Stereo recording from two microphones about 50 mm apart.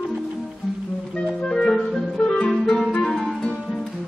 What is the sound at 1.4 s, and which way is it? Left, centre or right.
Music, centre.